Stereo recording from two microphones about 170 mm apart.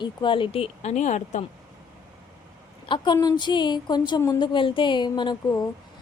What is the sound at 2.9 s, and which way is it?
A woman's voice, 25° left (ahead or behind).